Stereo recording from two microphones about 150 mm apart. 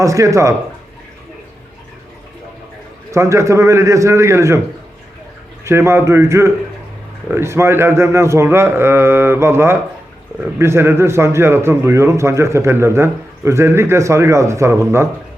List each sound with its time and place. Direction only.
0.0 s a man's voice: 20° right (ahead or behind)
3.1 s a man's voice: 20° right (ahead or behind)
5.6 s speech: 15° right (ahead or behind)